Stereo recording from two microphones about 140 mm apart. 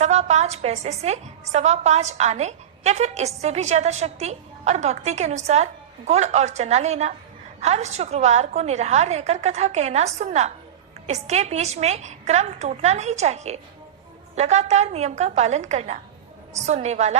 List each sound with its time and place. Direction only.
0.0 s a woman's voice: 55° right (ahead or behind)